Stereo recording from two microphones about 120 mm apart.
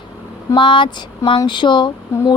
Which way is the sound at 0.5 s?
45° left (ahead or behind).